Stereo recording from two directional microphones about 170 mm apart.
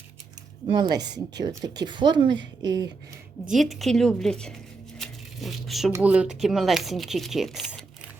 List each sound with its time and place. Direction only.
0.7 s speech: 25° right (ahead or behind)
3.5 s speech: centre (ahead or behind)
4.9 s a sound: centre (ahead or behind)
5.9 s speech: 10° right (ahead or behind)